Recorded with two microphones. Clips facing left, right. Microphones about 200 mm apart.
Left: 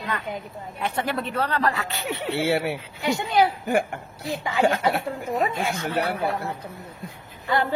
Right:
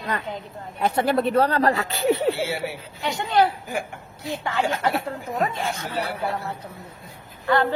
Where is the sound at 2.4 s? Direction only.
60° left (ahead or behind).